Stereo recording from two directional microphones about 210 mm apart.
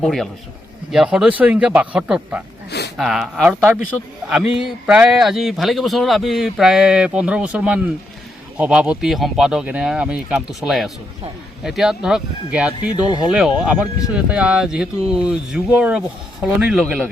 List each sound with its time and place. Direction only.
0.0 s speech: centre (ahead or behind)
2.6 s a sound: 50° left (ahead or behind)
3.0 s speech: centre (ahead or behind)
13.1 s speech: 20° left (ahead or behind)
13.3 s speech: 5° right (ahead or behind)